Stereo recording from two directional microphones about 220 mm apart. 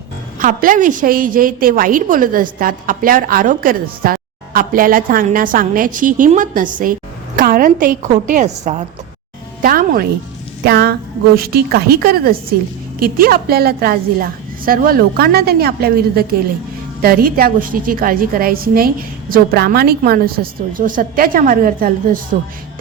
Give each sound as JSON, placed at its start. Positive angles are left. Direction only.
{"t": 0.3, "sound": "a woman's voice", "side_deg": -40}